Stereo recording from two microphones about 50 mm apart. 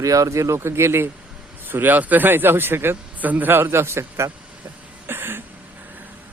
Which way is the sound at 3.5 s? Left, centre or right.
Right.